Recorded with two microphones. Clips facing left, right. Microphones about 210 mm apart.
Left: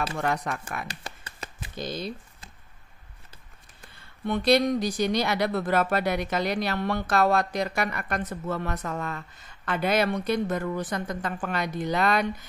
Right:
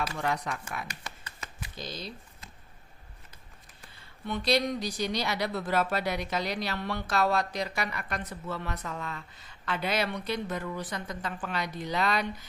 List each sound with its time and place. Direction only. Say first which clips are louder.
0.1 s speech: left 3 dB; 50° left (ahead or behind)
0.8 s a sound: left 3 dB; 35° left (ahead or behind)
1.8 s speech: left 8 dB; 55° left (ahead or behind)
4.3 s speech: left 6 dB; 55° left (ahead or behind)